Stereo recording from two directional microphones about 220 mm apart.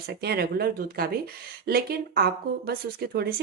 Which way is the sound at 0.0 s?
45° right (ahead or behind).